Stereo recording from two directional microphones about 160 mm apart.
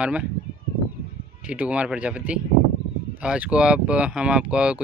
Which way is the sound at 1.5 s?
10° right (ahead or behind).